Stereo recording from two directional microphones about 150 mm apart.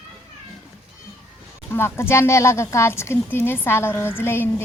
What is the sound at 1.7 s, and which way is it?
Speech, 15° left (ahead or behind).